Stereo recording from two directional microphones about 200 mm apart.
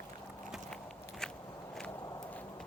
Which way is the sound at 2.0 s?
15° left (ahead or behind).